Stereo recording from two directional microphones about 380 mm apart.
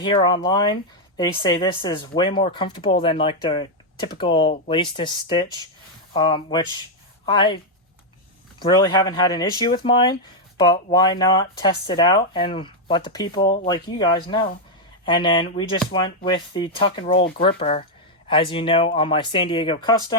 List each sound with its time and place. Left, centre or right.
0.0 s speech: centre
17.2 s speech: left